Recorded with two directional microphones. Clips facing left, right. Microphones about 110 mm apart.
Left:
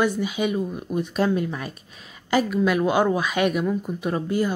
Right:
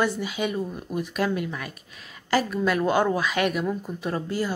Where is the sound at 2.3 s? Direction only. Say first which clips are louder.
Left 3 dB; 15° left (ahead or behind).